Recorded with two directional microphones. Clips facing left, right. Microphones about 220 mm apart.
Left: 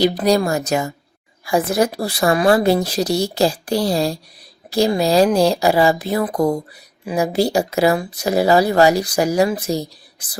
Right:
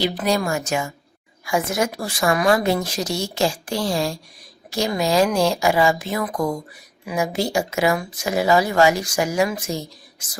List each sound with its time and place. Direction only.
0.0 s speech: 40° left (ahead or behind)